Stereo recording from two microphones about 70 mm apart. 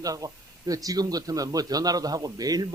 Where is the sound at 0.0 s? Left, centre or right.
Right.